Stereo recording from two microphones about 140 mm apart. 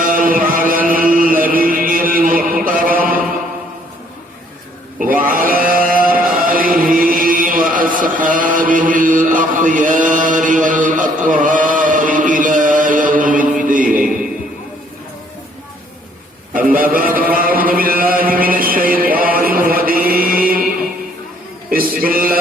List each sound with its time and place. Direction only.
0.0 s music: 80° right
4.9 s a sound: 85° right; by 13.5 s 70° right (ahead or behind)
13.6 s mantra: 70° right (ahead or behind)
16.6 s chant: 90° right
18.3 s a sound: 90° right
20.1 s chant: 90° right
21.7 s music: 90° right